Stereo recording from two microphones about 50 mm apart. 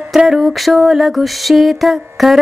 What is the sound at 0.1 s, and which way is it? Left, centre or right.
Music, centre.